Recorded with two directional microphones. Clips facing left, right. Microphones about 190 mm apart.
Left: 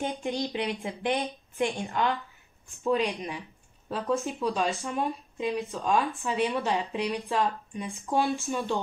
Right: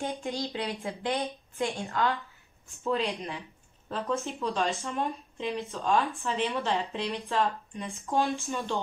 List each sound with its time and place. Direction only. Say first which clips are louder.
0.0 s speech: left 2 dB; 15° left (ahead or behind)